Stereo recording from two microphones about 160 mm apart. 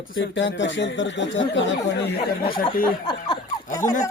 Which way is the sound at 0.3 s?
90° left.